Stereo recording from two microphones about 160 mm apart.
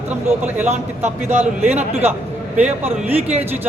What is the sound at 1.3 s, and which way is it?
Speech, 45° right (ahead or behind).